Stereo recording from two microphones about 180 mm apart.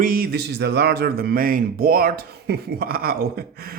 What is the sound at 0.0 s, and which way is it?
Speech, 55° right (ahead or behind).